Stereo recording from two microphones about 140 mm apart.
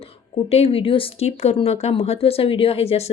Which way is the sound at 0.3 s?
45° left (ahead or behind).